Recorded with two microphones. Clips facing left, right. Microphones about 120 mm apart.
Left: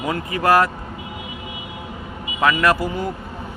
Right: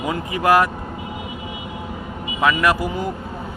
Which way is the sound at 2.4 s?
10° right (ahead or behind).